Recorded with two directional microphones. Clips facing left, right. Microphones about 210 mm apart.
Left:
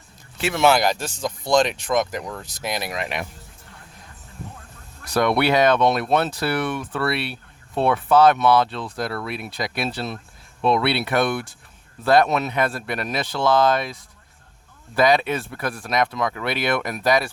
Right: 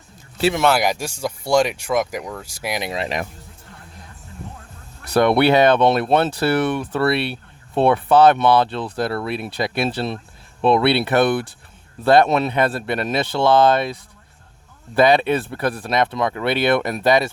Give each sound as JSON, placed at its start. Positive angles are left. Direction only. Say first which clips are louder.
{"t": 0.8, "sound": "speech", "louder": "right 1 dB", "side_deg": -10}
{"t": 2.9, "sound": "speech", "louder": "right 4 dB", "side_deg": -35}
{"t": 5.1, "sound": "speech", "louder": "right 4 dB", "side_deg": -30}